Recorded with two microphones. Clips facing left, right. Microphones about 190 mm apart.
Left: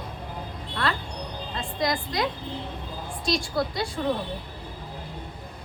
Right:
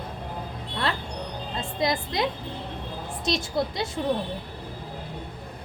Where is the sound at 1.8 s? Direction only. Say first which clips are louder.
Right 1 dB; 25° right (ahead or behind).